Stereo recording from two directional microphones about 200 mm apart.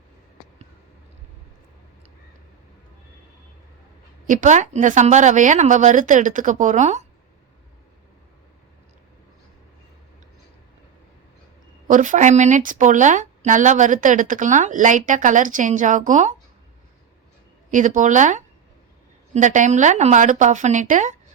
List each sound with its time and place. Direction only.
4.3 s speech: 40° right (ahead or behind)
11.9 s speech: 40° right (ahead or behind)
17.7 s speech: 40° right (ahead or behind)